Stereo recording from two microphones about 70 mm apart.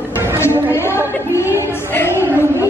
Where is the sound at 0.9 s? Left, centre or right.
Left.